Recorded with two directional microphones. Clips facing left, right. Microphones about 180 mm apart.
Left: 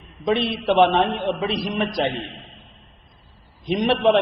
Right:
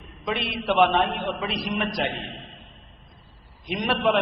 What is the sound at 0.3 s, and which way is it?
A man's voice, 30° left (ahead or behind).